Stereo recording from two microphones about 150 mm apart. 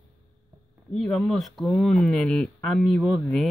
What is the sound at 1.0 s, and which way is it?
Speech, 5° left (ahead or behind).